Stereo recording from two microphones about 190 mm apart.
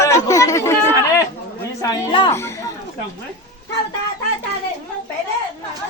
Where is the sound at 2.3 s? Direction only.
15° left (ahead or behind).